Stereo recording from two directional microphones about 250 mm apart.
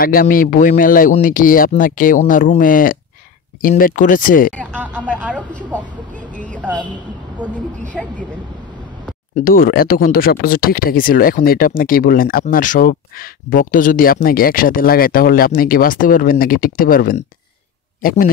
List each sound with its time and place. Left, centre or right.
0.0 s speech: left
5.3 s speech: centre
6.3 s a sound: centre
7.9 s speech: centre
9.3 s speech: left